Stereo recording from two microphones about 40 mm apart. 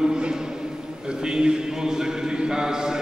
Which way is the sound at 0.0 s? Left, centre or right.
Centre.